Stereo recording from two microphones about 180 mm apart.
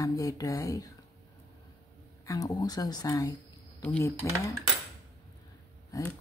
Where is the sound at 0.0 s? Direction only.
20° left (ahead or behind).